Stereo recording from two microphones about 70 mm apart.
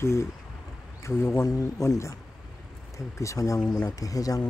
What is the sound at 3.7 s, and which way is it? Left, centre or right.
Speech, left.